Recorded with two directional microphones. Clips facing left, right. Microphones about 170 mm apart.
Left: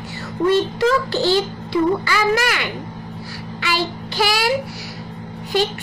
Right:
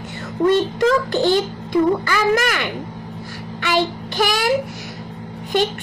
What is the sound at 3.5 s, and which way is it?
Child singing, 50° right (ahead or behind).